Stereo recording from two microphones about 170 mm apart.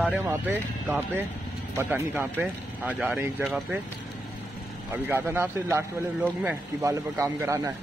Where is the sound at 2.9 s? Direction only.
Centre (ahead or behind).